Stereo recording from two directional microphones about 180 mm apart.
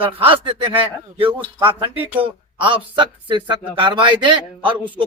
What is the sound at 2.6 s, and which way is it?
A man's voice, 30° right (ahead or behind).